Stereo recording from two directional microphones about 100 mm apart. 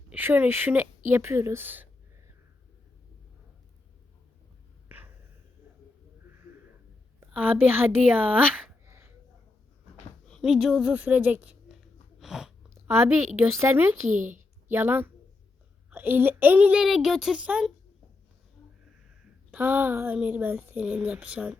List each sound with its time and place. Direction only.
0.1 s speech: 20° right (ahead or behind)
7.2 s a woman's voice: 20° right (ahead or behind)
8.9 s a sound: 30° right (ahead or behind)
10.4 s speech: 5° right (ahead or behind)
10.9 s speech: 15° right (ahead or behind)
12.2 s chewing: 5° right (ahead or behind)
12.7 s a woman's voice: 25° right (ahead or behind)
19.5 s a woman's voice: 20° right (ahead or behind)